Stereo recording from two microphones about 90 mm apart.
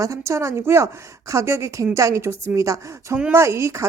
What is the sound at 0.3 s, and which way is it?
A woman's voice, 30° right (ahead or behind).